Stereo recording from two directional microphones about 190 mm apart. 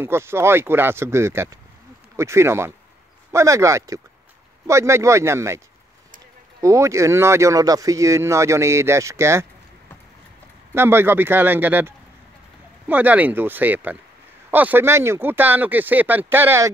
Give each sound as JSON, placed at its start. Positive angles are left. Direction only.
{"t": 0.0, "sound": "speech", "side_deg": -15}
{"t": 6.6, "sound": "speech", "side_deg": -15}
{"t": 10.7, "sound": "speech", "side_deg": -10}